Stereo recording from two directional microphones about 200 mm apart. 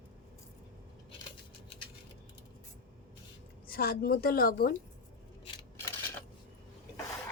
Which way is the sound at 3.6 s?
50° left (ahead or behind).